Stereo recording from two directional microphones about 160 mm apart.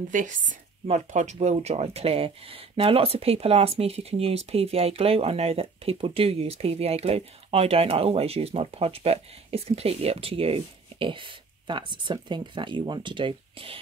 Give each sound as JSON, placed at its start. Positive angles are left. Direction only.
{"t": 0.1, "sound": "speech", "side_deg": -55}